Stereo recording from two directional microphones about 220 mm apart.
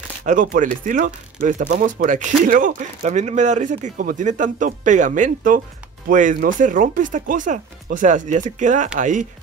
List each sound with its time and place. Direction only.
0.2 s speech: 35° right (ahead or behind)